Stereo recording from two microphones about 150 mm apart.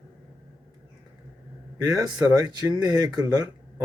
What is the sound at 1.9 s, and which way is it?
Speech, 20° right (ahead or behind).